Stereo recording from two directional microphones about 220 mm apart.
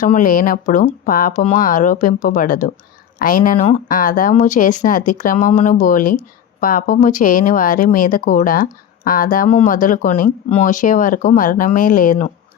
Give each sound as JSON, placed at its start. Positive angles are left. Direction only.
{"t": 0.0, "sound": "speech", "side_deg": 35}